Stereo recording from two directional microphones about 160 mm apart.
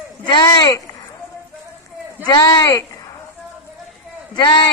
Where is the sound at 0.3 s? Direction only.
30° left (ahead or behind).